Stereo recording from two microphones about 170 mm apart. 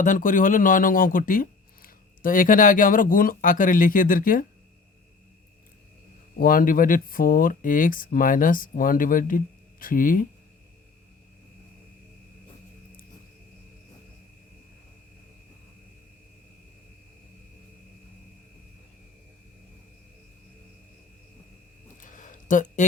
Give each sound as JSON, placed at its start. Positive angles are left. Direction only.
{"t": 0.0, "sound": "speech", "side_deg": 50}
{"t": 6.4, "sound": "speech", "side_deg": 55}
{"t": 22.0, "sound": "a sound", "side_deg": 50}